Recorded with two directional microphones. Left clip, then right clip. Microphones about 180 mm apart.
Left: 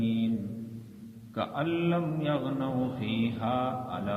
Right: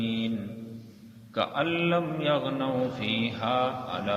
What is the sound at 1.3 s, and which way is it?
A man's voice, 45° right (ahead or behind).